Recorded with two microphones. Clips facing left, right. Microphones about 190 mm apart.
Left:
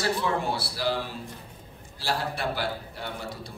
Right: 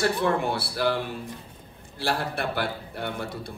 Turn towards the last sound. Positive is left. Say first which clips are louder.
# right 4 dB
turn(degrees=-55)  # may be behind; listen again after turning